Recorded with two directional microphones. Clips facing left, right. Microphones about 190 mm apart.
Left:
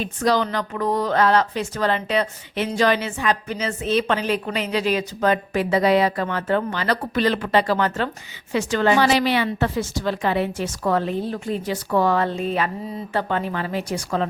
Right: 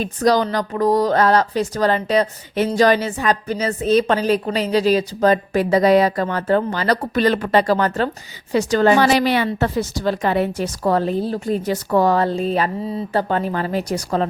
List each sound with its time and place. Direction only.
0.0 s speech: 40° right (ahead or behind)